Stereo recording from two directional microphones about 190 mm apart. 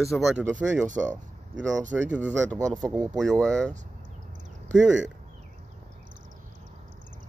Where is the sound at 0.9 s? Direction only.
40° right (ahead or behind).